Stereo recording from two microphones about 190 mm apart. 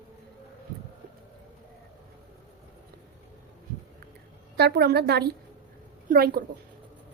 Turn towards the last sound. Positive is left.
turn(degrees=-55)  # may be behind; listen again after turning